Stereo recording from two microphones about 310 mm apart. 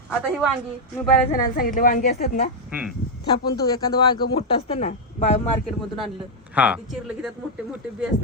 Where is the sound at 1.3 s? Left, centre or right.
Left.